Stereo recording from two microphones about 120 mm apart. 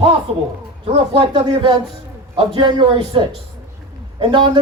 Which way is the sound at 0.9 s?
40° right (ahead or behind).